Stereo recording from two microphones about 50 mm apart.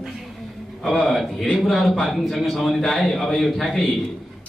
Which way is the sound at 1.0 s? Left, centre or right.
Centre.